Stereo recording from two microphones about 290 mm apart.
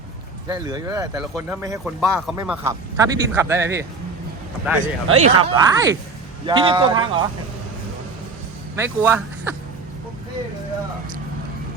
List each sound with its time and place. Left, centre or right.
0.4 s speech: centre
4.8 s speech: right
8.7 s speech: centre